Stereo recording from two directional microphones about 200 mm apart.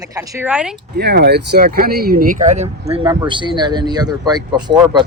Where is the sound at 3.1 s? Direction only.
20° right (ahead or behind).